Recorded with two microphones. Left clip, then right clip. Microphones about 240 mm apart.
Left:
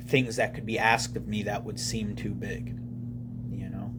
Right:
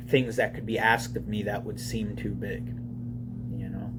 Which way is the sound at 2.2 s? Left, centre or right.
Left.